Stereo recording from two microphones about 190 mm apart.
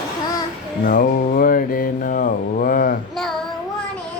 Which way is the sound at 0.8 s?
45° left (ahead or behind).